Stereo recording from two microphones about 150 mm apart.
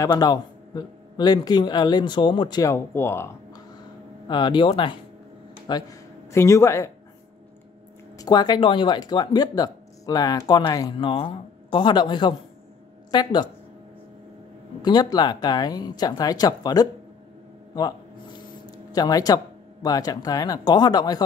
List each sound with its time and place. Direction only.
0.0 s a man's voice: 25° left (ahead or behind)
4.3 s speech: 30° left (ahead or behind)
8.2 s a man's voice: 25° left (ahead or behind)
14.8 s a man's voice: 30° left (ahead or behind)
18.9 s a man's voice: 25° left (ahead or behind)